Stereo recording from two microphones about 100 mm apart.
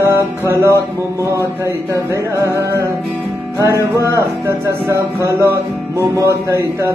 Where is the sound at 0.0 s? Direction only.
25° right (ahead or behind).